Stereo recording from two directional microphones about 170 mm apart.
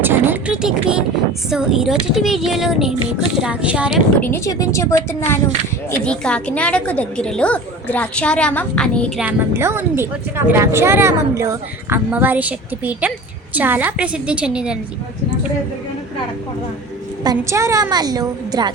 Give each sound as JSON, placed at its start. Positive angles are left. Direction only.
{"t": 0.0, "sound": "speech", "side_deg": -10}
{"t": 4.2, "sound": "a woman's voice", "side_deg": 15}
{"t": 17.2, "sound": "a woman's voice", "side_deg": -20}